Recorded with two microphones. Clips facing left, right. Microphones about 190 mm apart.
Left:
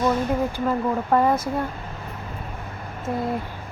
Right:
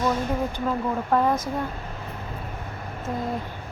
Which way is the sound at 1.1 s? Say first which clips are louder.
Left 2 dB; 10° left (ahead or behind).